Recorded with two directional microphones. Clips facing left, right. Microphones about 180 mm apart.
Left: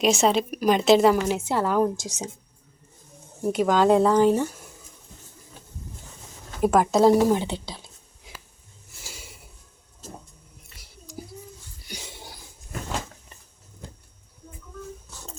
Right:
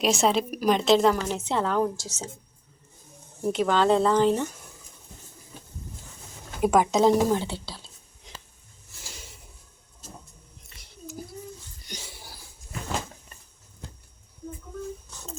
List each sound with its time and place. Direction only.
0.0 s a woman's voice: centre (ahead or behind); by 2.3 s 15° left (ahead or behind)
3.4 s a woman's voice: 10° left (ahead or behind)
6.6 s a woman's voice: centre (ahead or behind)
7.3 s a woman's voice: 15° left (ahead or behind)
8.3 s a sound: 5° left (ahead or behind)